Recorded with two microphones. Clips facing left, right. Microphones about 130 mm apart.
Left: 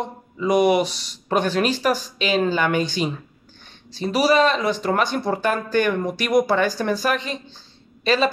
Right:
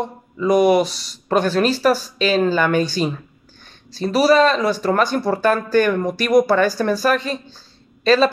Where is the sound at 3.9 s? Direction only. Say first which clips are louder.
Right 3 dB; 40° right (ahead or behind).